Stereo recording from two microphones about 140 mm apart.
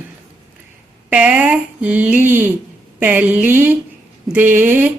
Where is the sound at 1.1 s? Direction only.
10° right (ahead or behind).